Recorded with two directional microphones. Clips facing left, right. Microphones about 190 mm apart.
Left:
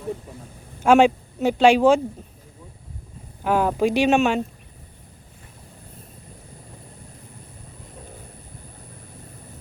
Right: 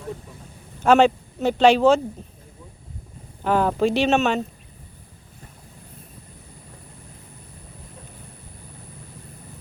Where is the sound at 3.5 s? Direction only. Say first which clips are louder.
Even; 10° left (ahead or behind).